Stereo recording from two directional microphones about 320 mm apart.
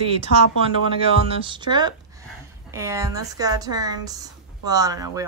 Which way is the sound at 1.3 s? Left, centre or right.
Centre.